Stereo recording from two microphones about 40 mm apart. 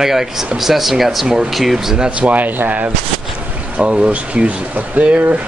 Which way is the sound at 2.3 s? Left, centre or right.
Right.